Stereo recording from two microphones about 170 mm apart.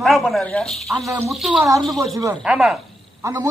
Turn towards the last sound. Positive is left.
turn(degrees=-15)  # may be behind; listen again after turning